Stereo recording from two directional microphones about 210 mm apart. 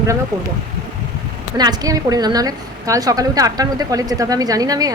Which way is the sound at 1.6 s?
20° right (ahead or behind).